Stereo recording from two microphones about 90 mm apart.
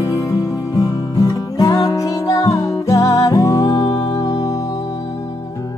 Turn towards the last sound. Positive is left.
turn(degrees=40)  # may be behind; listen again after turning